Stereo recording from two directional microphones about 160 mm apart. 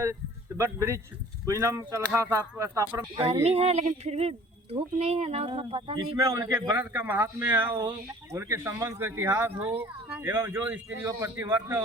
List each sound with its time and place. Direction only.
0.0 s speech: 20° right (ahead or behind)
3.4 s speech: 40° right (ahead or behind)
6.2 s speech: 20° right (ahead or behind)